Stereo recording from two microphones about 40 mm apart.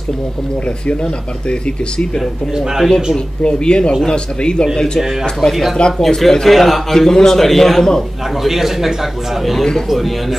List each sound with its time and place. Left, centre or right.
3.4 s speech: left
5.5 s a man's voice: centre
8.5 s a man's voice: centre